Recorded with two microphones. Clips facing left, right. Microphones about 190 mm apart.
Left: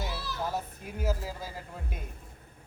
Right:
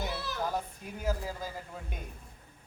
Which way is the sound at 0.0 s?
55° right (ahead or behind).